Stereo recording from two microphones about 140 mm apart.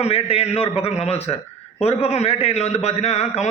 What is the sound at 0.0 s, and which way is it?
A man's voice, 45° left (ahead or behind).